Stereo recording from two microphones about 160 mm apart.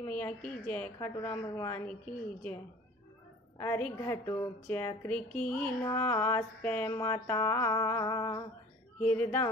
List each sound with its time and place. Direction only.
0.1 s music: 10° left (ahead or behind)
3.5 s music: 15° left (ahead or behind)
9.0 s music: 10° left (ahead or behind)